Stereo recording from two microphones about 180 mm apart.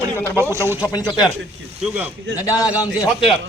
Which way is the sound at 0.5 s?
15° right (ahead or behind).